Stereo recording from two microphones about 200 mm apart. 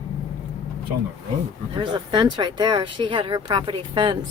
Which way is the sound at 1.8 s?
25° right (ahead or behind).